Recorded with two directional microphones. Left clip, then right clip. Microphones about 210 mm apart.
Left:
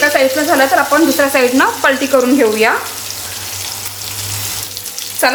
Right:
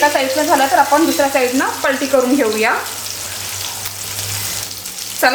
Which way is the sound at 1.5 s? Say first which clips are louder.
Left 5 dB; 25° left (ahead or behind).